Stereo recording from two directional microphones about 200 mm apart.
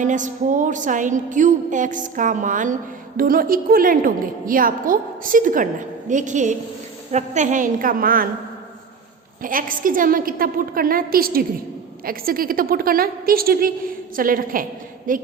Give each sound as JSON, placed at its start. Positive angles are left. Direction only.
{"t": 0.0, "sound": "a woman's voice", "side_deg": -40}
{"t": 9.4, "sound": "a woman's voice", "side_deg": -45}